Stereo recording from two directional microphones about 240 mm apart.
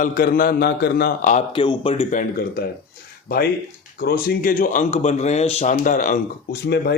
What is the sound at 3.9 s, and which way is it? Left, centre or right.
Speech, left.